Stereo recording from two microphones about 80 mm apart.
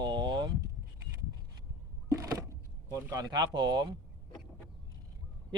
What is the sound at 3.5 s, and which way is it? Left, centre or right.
Speech, right.